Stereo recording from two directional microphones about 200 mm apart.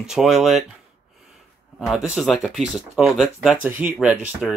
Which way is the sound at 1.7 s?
Centre (ahead or behind).